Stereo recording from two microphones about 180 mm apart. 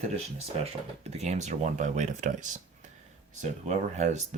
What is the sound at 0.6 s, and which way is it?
Speech, 35° right (ahead or behind).